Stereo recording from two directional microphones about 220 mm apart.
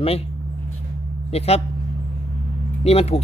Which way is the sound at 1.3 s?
25° left (ahead or behind).